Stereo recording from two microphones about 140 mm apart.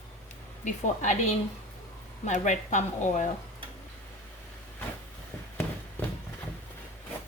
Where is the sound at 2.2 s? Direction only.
60° left (ahead or behind).